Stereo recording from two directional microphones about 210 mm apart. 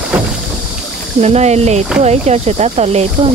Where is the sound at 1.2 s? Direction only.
30° right (ahead or behind).